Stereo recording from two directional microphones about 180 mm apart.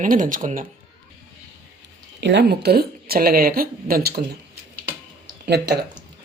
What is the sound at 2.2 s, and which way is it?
A woman's voice, 75° right (ahead or behind).